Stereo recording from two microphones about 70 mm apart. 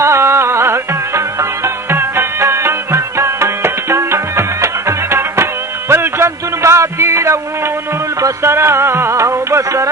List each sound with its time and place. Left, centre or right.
0.0 s music: right
2.4 s tabla: right
5.9 s music: right
8.4 s music: right